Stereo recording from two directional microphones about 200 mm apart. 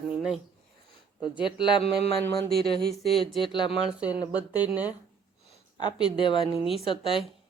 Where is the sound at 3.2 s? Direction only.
25° left (ahead or behind).